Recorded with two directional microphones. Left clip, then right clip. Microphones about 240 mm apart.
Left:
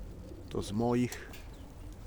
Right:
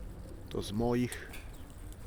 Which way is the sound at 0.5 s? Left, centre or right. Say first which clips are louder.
Left 1 dB; centre.